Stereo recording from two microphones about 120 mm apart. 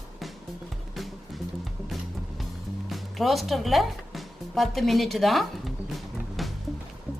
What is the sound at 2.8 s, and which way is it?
Music, centre (ahead or behind).